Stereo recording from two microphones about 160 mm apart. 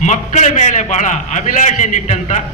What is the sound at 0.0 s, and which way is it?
A man's voice, 50° left (ahead or behind).